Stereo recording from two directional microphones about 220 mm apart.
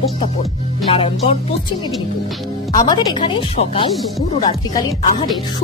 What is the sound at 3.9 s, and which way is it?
Speech, centre (ahead or behind).